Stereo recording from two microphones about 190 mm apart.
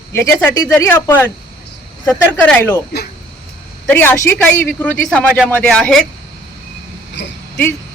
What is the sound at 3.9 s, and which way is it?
A man's voice, 10° left (ahead or behind).